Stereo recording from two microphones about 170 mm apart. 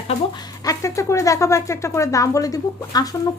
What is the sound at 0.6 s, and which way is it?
A woman's voice, 20° left (ahead or behind).